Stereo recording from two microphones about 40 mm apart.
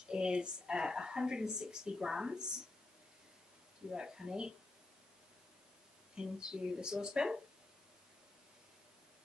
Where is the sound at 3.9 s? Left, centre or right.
Centre.